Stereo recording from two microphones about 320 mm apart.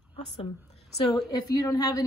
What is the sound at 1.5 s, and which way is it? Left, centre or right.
Speech, centre.